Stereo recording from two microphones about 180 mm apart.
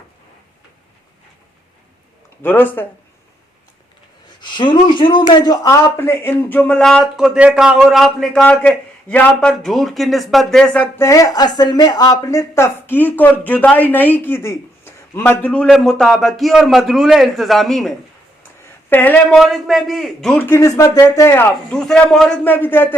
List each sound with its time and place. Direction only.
2.4 s speech: 10° left (ahead or behind)
4.4 s speech: 25° left (ahead or behind); by 19.2 s 10° left (ahead or behind)
19.3 s a man's voice: centre (ahead or behind)